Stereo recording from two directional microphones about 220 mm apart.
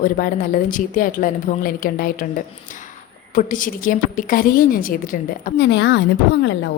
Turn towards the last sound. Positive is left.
turn(degrees=55)  # may be behind; listen again after turning